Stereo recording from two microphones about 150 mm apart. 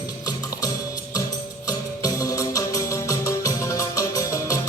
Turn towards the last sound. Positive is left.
turn(degrees=20)  # may be behind; listen again after turning